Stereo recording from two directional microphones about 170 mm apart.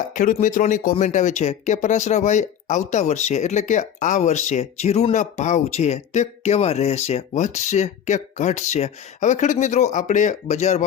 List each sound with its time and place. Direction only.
0.1 s speech: 50° left (ahead or behind)